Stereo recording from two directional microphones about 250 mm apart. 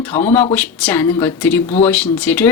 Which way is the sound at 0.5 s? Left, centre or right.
Centre.